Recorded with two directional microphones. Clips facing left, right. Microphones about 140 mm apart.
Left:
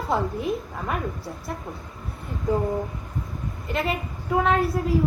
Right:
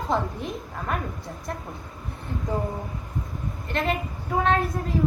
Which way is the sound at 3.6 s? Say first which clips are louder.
Even; 5° left (ahead or behind).